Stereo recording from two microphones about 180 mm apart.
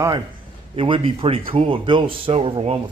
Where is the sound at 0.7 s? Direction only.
30° right (ahead or behind).